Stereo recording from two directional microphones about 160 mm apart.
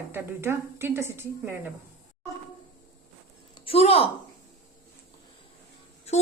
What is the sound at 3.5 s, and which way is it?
Speech, 35° left (ahead or behind).